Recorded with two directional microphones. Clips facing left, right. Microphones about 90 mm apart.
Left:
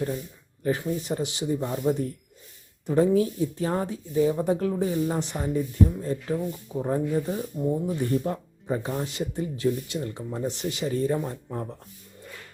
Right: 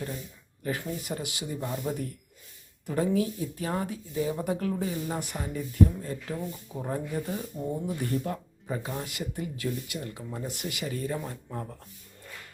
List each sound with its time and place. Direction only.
0.8 s speech: 25° left (ahead or behind)
7.5 s speech: 5° left (ahead or behind)
8.0 s speech: 30° left (ahead or behind)